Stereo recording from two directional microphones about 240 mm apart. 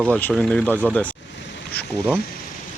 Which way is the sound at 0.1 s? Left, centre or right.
Centre.